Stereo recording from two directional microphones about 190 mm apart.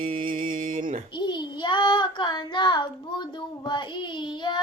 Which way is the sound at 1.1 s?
25° left (ahead or behind).